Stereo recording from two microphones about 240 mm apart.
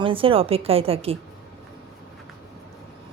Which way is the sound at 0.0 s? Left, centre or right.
Right.